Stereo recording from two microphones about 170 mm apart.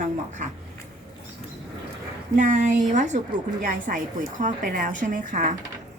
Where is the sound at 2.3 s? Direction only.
50° right (ahead or behind).